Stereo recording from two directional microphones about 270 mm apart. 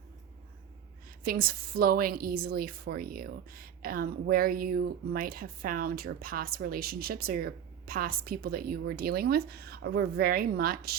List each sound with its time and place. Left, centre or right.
1.2 s a woman's voice: right